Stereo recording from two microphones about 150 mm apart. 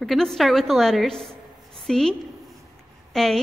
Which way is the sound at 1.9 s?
5° left (ahead or behind).